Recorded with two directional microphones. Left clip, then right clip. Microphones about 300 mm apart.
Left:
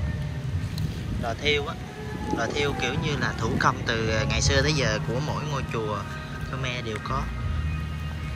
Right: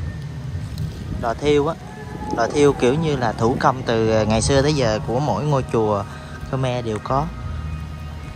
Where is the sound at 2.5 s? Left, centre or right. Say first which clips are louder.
Right 14 dB; centre.